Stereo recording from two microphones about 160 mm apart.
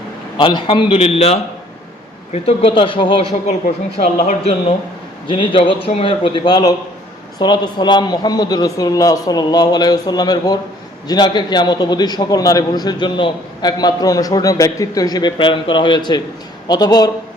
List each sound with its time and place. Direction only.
0.3 s a man's voice: 30° left (ahead or behind)
4.0 s speech: 40° left (ahead or behind)
5.3 s a man's voice: 30° left (ahead or behind)